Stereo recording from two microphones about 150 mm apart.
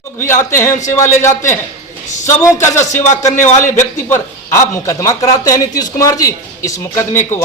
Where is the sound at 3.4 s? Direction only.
55° left (ahead or behind).